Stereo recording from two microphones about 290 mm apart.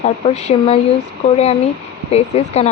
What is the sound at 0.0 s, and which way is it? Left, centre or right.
Speech, left.